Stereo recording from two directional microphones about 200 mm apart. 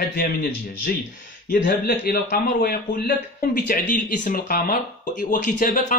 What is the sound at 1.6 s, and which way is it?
Speech, 60° left (ahead or behind).